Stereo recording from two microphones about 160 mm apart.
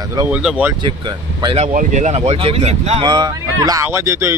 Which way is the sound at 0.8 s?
30° right (ahead or behind).